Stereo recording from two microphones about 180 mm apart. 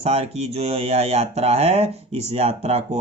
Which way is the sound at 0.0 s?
35° right (ahead or behind).